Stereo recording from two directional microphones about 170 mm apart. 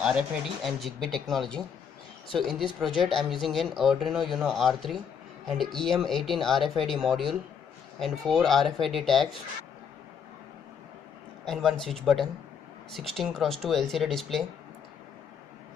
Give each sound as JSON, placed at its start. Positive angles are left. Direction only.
{"t": 0.0, "sound": "speech", "side_deg": 0}
{"t": 11.4, "sound": "speech", "side_deg": 0}